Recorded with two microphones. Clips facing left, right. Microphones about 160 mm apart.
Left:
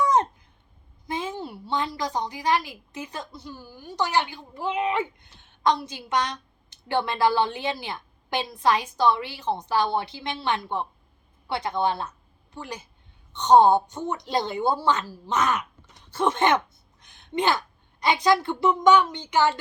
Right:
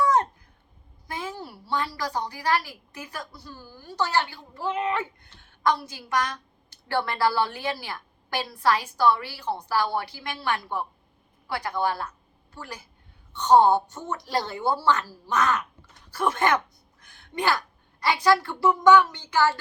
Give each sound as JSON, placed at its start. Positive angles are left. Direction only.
{"t": 0.0, "sound": "babbling", "side_deg": 20}
{"t": 1.0, "sound": "a woman's voice", "side_deg": 20}
{"t": 17.0, "sound": "a sound", "side_deg": 20}
{"t": 18.0, "sound": "a woman's voice", "side_deg": 20}